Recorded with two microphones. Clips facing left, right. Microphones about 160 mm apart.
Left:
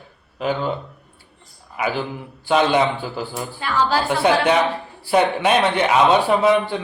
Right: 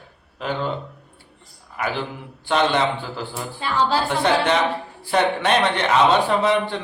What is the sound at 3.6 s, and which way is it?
Speech, 25° right (ahead or behind).